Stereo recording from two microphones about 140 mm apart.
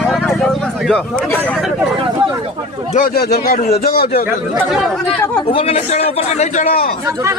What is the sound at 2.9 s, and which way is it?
Speech, 80° left.